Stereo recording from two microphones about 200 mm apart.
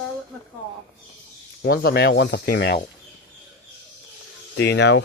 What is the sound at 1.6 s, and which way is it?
Speech, 50° left (ahead or behind).